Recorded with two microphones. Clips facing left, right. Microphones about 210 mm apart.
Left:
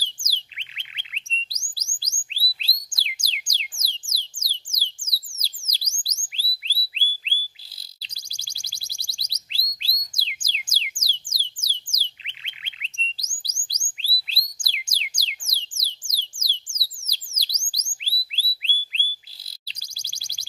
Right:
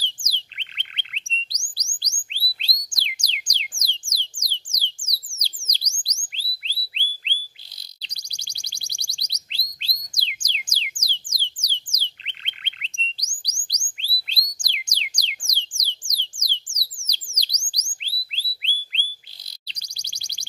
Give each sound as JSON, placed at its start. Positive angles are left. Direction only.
{"t": 0.0, "sound": "bird", "side_deg": 5}
{"t": 1.7, "sound": "chirp tone", "side_deg": 5}
{"t": 4.4, "sound": "a sound", "side_deg": 5}
{"t": 5.3, "sound": "a sound", "side_deg": -25}
{"t": 5.7, "sound": "bird", "side_deg": 5}
{"t": 8.0, "sound": "alarm", "side_deg": 5}
{"t": 11.0, "sound": "music", "side_deg": 10}
{"t": 11.6, "sound": "bird", "side_deg": 5}
{"t": 13.7, "sound": "a sound", "side_deg": 5}
{"t": 16.3, "sound": "chirp tone", "side_deg": 10}